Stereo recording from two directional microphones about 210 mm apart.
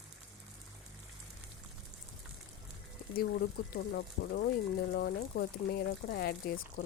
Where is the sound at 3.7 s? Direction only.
50° left (ahead or behind).